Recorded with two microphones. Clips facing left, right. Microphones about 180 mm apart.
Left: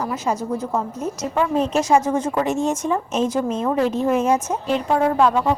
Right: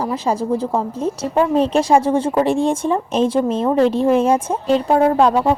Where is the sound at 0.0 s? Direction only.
30° right (ahead or behind).